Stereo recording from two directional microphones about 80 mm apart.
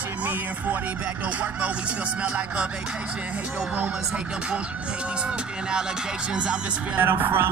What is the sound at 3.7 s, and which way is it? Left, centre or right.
Speech, centre.